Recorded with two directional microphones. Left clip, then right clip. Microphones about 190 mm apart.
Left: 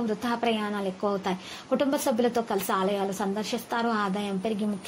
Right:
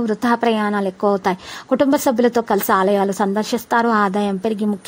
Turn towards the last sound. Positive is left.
turn(degrees=-50)  # may be behind; listen again after turning